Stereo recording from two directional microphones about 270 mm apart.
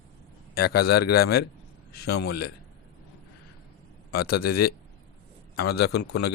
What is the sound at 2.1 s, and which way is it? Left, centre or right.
Speech, left.